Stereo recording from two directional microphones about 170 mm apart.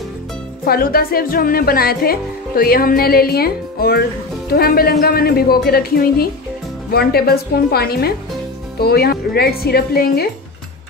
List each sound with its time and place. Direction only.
0.7 s speech: 60° left (ahead or behind)